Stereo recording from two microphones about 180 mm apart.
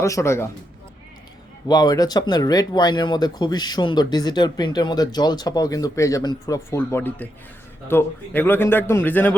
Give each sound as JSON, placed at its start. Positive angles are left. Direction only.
{"t": 0.0, "sound": "a man's voice", "side_deg": 15}
{"t": 1.6, "sound": "a man's voice", "side_deg": 20}